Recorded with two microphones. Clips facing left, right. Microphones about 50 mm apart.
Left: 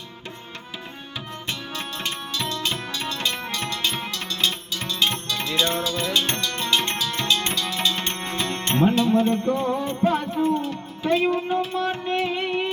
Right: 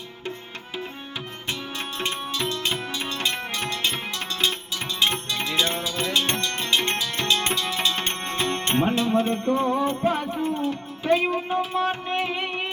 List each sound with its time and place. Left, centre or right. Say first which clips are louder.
2.0 s music: right 3 dB; right
9.7 s music: even; centre